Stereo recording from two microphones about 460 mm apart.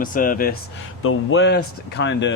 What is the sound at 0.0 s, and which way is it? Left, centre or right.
Speech, centre.